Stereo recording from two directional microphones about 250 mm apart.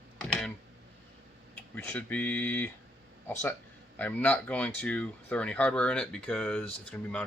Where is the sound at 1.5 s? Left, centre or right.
Centre.